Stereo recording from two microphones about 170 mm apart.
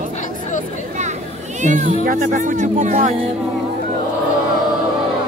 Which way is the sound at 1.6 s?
45° right (ahead or behind).